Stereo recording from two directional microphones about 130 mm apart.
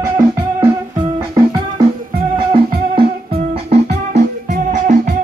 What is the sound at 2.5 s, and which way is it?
Music, 45° right (ahead or behind).